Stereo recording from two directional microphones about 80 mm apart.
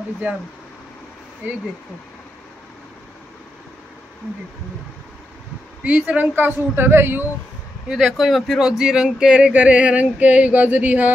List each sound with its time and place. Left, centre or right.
1.4 s speech: right
5.9 s speech: centre
7.9 s speech: centre; by 11.1 s right